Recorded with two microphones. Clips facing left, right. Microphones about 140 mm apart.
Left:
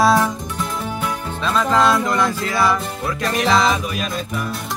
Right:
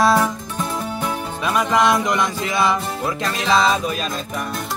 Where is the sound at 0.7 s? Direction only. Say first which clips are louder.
Right 1 dB; 35° right (ahead or behind).